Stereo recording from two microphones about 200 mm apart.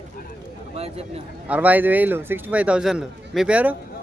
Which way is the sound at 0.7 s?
30° right (ahead or behind).